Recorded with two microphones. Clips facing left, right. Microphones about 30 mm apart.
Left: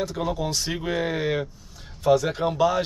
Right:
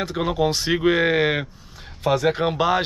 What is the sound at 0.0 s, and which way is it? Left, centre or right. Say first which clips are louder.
Speech: right 5 dB; right.